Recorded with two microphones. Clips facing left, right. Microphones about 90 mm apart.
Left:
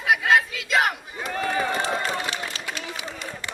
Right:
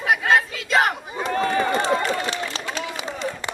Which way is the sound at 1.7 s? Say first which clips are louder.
Right 4 dB; 30° right (ahead or behind).